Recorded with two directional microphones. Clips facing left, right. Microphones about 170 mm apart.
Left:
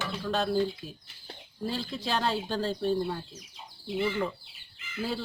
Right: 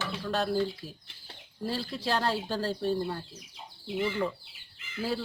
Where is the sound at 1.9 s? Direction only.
5° right (ahead or behind).